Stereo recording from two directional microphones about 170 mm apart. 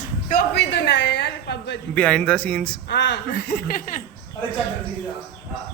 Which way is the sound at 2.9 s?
90° left.